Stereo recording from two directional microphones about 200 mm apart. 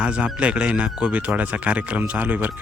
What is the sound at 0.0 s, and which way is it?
A man's voice, 5° right (ahead or behind).